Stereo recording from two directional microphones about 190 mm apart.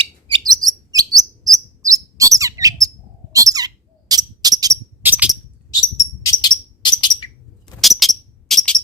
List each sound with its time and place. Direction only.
0.0 s chirp: 25° right (ahead or behind)
3.3 s a sound: 20° right (ahead or behind)
4.6 s bird: 15° right (ahead or behind)
6.0 s bird: 20° left (ahead or behind)
7.8 s bird: centre (ahead or behind)